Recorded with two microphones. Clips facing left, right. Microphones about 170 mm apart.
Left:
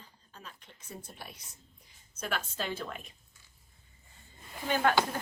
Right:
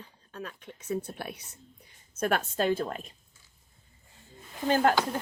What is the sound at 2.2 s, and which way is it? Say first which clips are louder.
Speech: right 9 dB; 50° right (ahead or behind).